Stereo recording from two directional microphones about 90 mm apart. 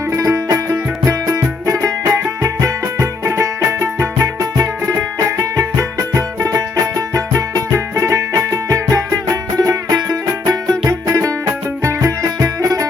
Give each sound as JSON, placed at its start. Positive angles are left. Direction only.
{"t": 0.1, "sound": "music", "side_deg": -35}